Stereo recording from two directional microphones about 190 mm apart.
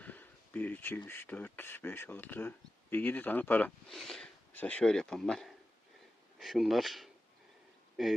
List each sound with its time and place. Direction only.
0.0 s speech: 10° left (ahead or behind)